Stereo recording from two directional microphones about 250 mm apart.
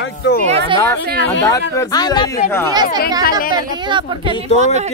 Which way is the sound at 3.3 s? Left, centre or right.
Left.